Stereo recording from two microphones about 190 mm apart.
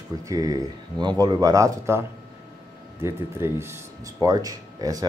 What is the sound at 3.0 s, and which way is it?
Speech, 15° right (ahead or behind).